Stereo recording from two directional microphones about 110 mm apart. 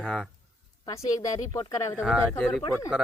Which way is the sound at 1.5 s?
45° left (ahead or behind).